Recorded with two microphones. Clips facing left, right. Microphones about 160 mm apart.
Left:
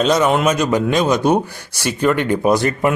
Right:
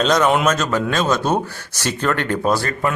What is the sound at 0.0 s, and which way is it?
Speech, 10° left (ahead or behind).